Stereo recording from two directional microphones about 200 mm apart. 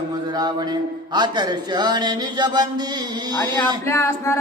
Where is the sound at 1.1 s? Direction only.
20° right (ahead or behind).